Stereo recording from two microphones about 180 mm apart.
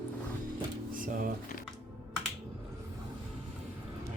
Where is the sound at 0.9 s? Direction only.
50° right (ahead or behind).